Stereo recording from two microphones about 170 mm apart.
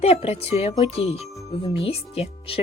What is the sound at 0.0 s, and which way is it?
Speech, 35° left (ahead or behind).